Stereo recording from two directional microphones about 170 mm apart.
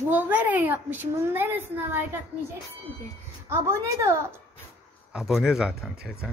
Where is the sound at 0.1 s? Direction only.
10° right (ahead or behind).